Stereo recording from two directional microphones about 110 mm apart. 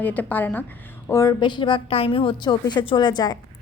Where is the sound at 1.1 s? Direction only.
30° left (ahead or behind).